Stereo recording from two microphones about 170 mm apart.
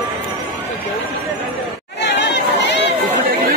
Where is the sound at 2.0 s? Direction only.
90° left.